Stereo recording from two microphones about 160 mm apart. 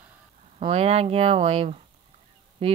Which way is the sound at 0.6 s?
40° right (ahead or behind).